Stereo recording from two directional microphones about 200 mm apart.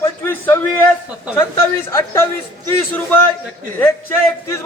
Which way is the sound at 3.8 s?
10° left (ahead or behind).